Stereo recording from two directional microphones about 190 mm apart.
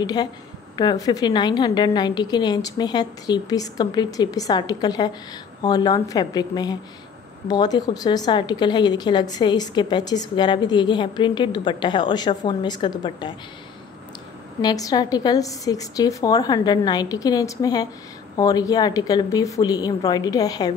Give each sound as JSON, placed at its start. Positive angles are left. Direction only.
{"t": 0.0, "sound": "speech", "side_deg": 20}
{"t": 14.6, "sound": "speech", "side_deg": 20}